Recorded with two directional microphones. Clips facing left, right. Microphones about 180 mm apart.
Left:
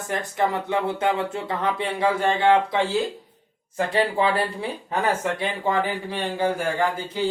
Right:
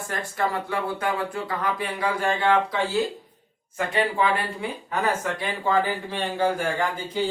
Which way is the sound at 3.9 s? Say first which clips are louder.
Left 1 dB; 35° left (ahead or behind).